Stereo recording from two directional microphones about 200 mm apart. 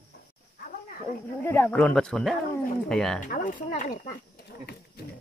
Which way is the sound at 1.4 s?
10° left (ahead or behind).